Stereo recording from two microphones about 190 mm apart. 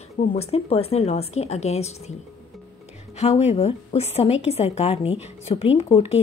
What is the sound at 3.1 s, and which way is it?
A woman's voice, 35° left (ahead or behind).